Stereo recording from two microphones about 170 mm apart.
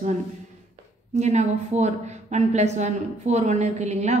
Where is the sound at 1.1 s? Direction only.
40° right (ahead or behind).